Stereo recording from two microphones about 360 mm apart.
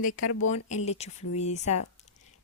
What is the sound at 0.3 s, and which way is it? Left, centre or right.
Speech, left.